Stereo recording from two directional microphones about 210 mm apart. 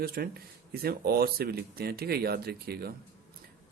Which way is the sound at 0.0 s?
45° right (ahead or behind).